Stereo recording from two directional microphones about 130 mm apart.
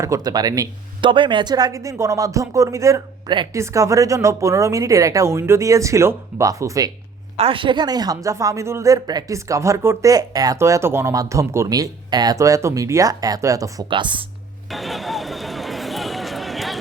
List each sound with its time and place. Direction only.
0.0 s a woman's voice: 25° right (ahead or behind)
1.1 s a woman's voice: 40° right (ahead or behind)
7.3 s a woman's voice: 45° right (ahead or behind); by 13.8 s 25° right (ahead or behind)
13.9 s speech: 40° right (ahead or behind)
14.7 s a sound: centre (ahead or behind)